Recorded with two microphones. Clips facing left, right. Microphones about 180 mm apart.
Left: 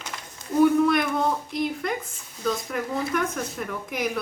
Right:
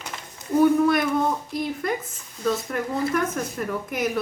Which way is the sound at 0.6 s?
Centre (ahead or behind).